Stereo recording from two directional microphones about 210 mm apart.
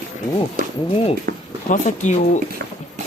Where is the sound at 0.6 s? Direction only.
40° right (ahead or behind).